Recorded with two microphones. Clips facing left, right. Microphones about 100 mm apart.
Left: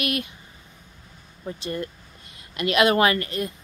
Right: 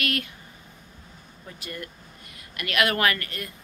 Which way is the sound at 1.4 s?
30° left (ahead or behind).